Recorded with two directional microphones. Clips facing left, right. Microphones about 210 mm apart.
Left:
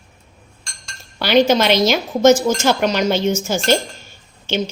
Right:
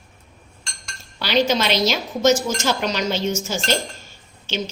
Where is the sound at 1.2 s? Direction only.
55° left (ahead or behind).